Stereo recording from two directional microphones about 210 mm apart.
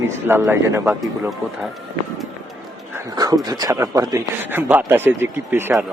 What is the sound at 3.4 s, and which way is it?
A man's voice, 20° right (ahead or behind).